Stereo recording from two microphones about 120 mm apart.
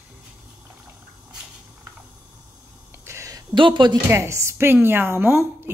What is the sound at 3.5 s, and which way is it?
Speech, 40° right (ahead or behind).